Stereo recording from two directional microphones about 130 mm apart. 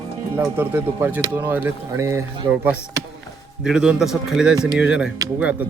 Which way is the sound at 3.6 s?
5° right (ahead or behind).